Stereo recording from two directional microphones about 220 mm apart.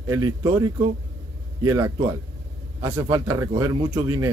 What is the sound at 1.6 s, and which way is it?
A man's voice, 15° right (ahead or behind).